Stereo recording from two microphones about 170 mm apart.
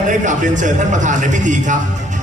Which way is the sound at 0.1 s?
50° right (ahead or behind).